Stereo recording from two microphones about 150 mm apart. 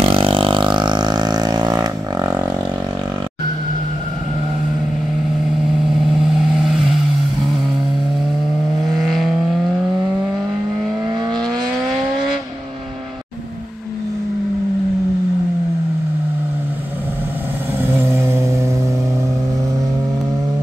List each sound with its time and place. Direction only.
0.0 s vehicle: 35° right (ahead or behind)
8.8 s vehicle: centre (ahead or behind)
17.8 s vehicle: 15° right (ahead or behind)